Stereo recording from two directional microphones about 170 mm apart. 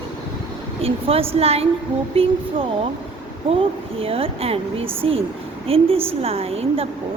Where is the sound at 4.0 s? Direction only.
35° right (ahead or behind).